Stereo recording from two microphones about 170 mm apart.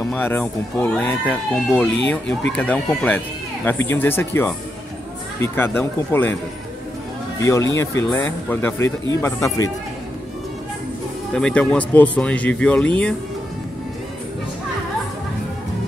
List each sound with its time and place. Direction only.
0.1 s speech: 10° left (ahead or behind)
7.3 s speech: 15° left (ahead or behind)
11.3 s speech: 5° left (ahead or behind)